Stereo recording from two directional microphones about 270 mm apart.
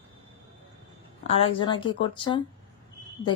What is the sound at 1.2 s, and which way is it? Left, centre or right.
A woman's voice, left.